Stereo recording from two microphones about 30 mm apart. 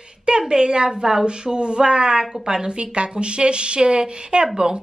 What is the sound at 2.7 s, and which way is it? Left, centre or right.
A woman's voice, right.